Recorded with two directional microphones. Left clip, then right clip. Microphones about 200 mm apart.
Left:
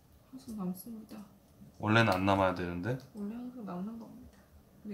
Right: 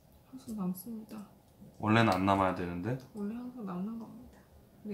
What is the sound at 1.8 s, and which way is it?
Speech, 25° left (ahead or behind).